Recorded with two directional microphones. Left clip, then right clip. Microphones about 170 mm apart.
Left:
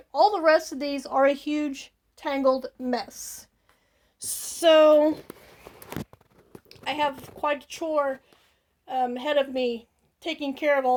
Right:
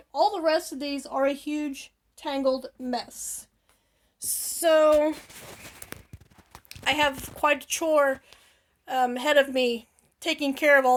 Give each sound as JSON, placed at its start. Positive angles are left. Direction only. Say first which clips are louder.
{"t": 0.1, "sound": "speech", "louder": "left 4 dB", "side_deg": 35}
{"t": 6.7, "sound": "a woman's voice", "louder": "right 3 dB", "side_deg": -5}